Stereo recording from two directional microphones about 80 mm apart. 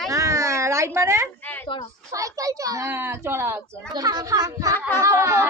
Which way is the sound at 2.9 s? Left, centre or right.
Right.